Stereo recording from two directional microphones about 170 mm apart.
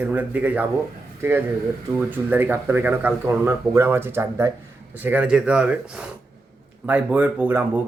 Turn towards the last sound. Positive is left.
turn(degrees=-10)  # may be behind; listen again after turning